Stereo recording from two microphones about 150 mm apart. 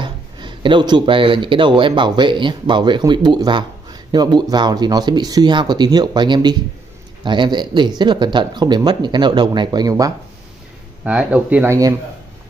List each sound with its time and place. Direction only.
0.0 s speech: 30° right (ahead or behind)
11.1 s speech: 10° right (ahead or behind)